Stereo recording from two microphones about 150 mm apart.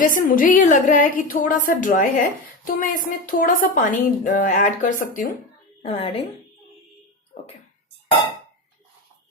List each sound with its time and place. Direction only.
0.3 s speech: 65° left (ahead or behind)
5.8 s a woman's voice: 40° left (ahead or behind)